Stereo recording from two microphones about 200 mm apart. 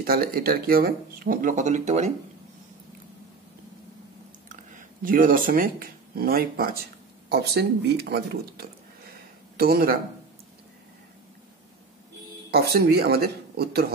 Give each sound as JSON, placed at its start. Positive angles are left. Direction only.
{"t": 0.0, "sound": "speech", "side_deg": -50}
{"t": 4.5, "sound": "speech", "side_deg": -40}
{"t": 12.4, "sound": "speech", "side_deg": -50}